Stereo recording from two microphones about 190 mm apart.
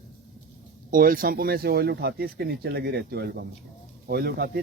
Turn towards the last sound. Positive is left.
turn(degrees=-55)  # may be behind; listen again after turning